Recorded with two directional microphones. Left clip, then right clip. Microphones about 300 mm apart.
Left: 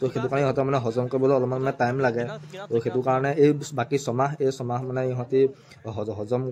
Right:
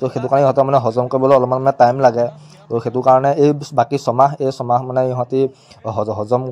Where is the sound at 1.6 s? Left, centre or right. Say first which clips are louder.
Right 12 dB; centre.